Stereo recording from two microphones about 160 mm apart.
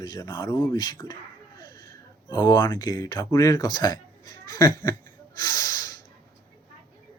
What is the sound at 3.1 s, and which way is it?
Speech, 20° left (ahead or behind).